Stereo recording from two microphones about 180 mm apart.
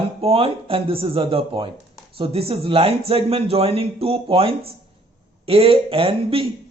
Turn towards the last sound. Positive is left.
turn(degrees=-30)  # may be behind; listen again after turning